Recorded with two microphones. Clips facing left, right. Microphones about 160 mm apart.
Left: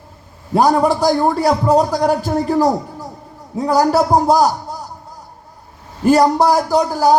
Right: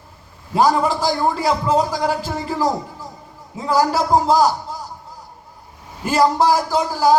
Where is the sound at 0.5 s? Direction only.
50° left (ahead or behind).